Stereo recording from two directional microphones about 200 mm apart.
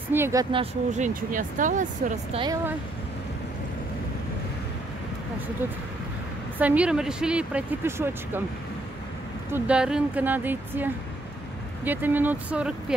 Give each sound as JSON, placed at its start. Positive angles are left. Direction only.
{"t": 0.1, "sound": "speech", "side_deg": -15}
{"t": 0.9, "sound": "speech", "side_deg": -40}
{"t": 2.3, "sound": "speech", "side_deg": -20}
{"t": 6.6, "sound": "speech", "side_deg": -5}
{"t": 9.5, "sound": "speech", "side_deg": -5}